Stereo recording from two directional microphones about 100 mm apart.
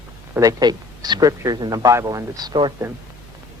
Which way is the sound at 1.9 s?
30° right (ahead or behind).